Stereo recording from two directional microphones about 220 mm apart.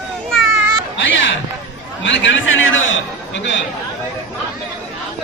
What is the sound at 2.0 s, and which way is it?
A man's voice, 55° left (ahead or behind).